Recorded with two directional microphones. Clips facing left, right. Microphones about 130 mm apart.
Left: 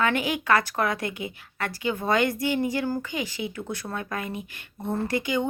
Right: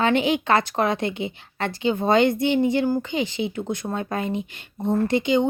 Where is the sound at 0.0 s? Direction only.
25° right (ahead or behind).